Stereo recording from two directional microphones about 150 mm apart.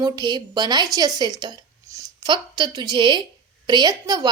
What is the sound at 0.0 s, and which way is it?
A woman's voice, 25° right (ahead or behind).